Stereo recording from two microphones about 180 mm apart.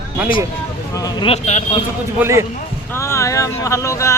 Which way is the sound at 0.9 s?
20° left (ahead or behind).